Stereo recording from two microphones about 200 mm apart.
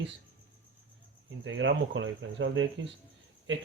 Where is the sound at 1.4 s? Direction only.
70° right (ahead or behind).